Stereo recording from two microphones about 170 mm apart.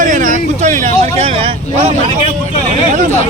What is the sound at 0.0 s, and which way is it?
Vehicle, 50° right (ahead or behind).